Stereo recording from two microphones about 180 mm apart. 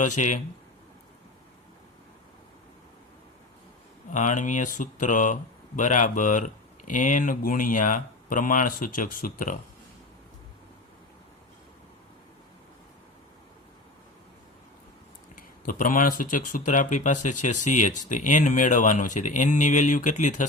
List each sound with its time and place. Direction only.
0.0 s speech: 45° left (ahead or behind)
4.1 s speech: 45° left (ahead or behind)
15.4 s speech: 50° left (ahead or behind)